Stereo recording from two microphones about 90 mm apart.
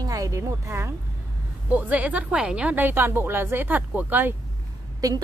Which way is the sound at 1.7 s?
15° right (ahead or behind).